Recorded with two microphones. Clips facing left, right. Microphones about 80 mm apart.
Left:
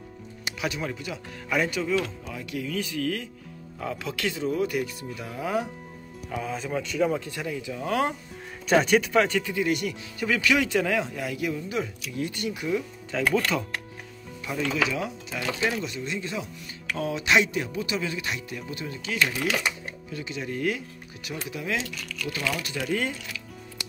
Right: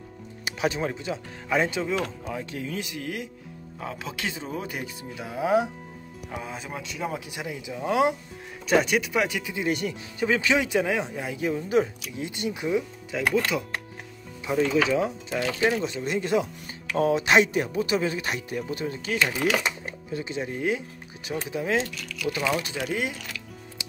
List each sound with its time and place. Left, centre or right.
0.6 s a man's voice: right
8.6 s speech: centre
9.6 s speech: right
12.2 s speech: right
13.1 s a man's voice: centre
14.4 s speech: right
16.1 s speech: right
22.2 s speech: centre